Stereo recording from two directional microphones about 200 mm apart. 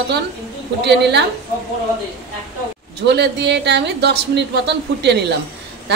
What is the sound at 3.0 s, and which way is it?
Speech, 55° right (ahead or behind).